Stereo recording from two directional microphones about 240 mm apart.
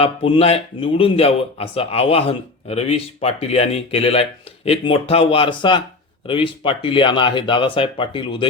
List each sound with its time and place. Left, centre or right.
0.0 s speech: left